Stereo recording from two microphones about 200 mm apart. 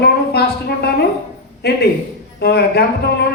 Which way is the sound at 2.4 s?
55° left (ahead or behind).